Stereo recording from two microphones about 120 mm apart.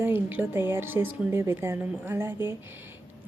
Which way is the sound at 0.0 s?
15° right (ahead or behind).